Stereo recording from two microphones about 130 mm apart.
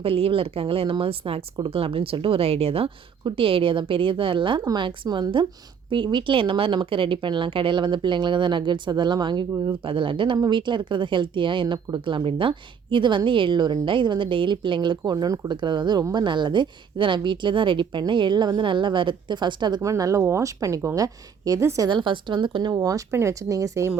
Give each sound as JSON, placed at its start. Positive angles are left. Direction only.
{"t": 0.0, "sound": "speech", "side_deg": -45}
{"t": 21.8, "sound": "speech", "side_deg": -40}